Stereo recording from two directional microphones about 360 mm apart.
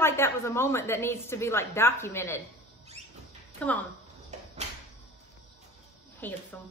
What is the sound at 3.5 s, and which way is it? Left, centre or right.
Speech, centre.